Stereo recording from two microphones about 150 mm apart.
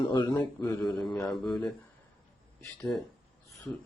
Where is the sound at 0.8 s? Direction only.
5° left (ahead or behind).